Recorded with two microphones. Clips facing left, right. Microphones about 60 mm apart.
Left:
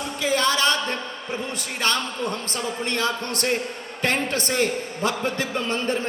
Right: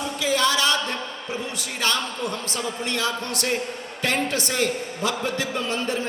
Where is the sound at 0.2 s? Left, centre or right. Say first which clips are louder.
Left 1 dB; left.